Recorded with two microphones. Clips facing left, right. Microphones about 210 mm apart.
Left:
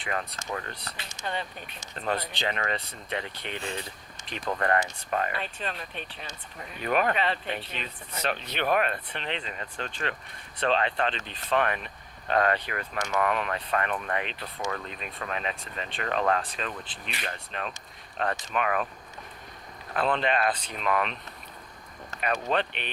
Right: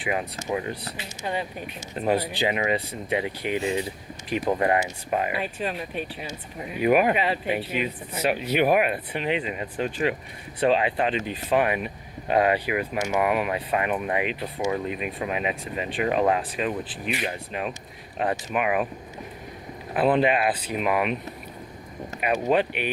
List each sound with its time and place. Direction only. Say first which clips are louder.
0.0 s speech: right 5 dB; 10° right (ahead or behind)
19.9 s speech: right 6 dB; 10° right (ahead or behind)